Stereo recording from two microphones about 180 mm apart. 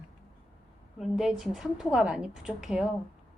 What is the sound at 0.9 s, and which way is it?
A woman's voice, centre (ahead or behind).